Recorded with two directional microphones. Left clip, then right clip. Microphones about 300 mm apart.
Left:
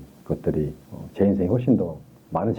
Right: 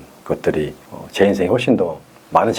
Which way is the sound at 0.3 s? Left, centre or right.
Centre.